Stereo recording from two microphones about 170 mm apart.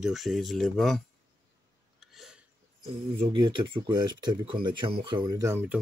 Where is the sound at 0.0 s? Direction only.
Centre (ahead or behind).